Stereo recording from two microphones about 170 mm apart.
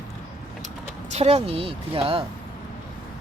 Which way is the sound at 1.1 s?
40° right (ahead or behind).